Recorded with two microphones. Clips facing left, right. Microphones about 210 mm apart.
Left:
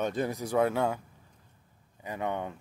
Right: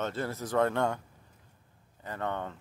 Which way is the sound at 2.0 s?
10° left (ahead or behind).